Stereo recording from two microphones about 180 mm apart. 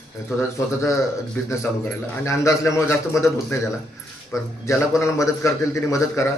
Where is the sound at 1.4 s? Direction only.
10° left (ahead or behind).